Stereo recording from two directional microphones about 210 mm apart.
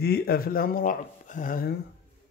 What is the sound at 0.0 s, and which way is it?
Speech, 50° left (ahead or behind).